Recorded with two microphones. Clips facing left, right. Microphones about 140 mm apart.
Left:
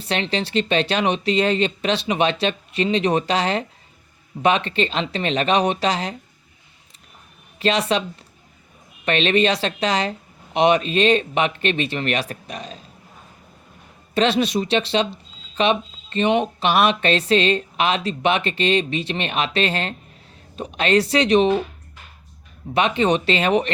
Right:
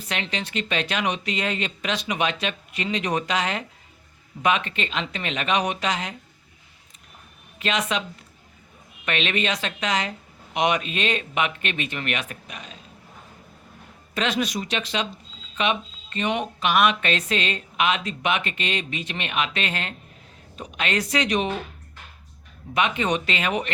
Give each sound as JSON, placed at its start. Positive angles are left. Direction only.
{"t": 0.0, "sound": "speech", "side_deg": 30}
{"t": 7.6, "sound": "speech", "side_deg": 35}
{"t": 9.0, "sound": "speech", "side_deg": 35}
{"t": 14.1, "sound": "speech", "side_deg": 30}
{"t": 22.7, "sound": "speech", "side_deg": 30}